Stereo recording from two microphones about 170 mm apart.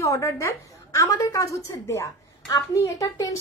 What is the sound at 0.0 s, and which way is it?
A woman's voice, 20° left (ahead or behind).